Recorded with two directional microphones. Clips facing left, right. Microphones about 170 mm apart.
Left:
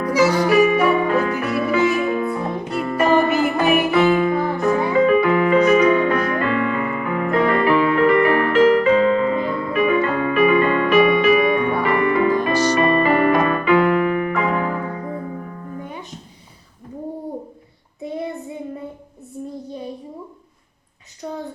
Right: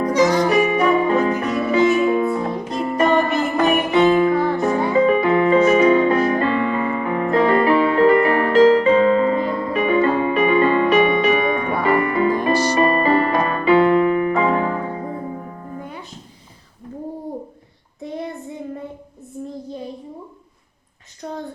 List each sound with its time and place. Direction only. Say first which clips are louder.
0.1 s music: even; 5° left (ahead or behind)
0.3 s music: left 1 dB; 35° right (ahead or behind)
3.0 s music: left 1 dB; 10° left (ahead or behind)
3.9 s music: right 2 dB; 35° right (ahead or behind)